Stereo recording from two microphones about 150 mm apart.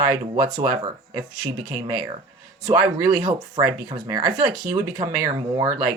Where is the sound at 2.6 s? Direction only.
25° right (ahead or behind).